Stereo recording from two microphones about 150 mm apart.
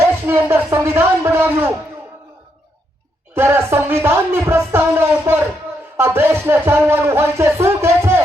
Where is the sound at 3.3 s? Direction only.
15° right (ahead or behind).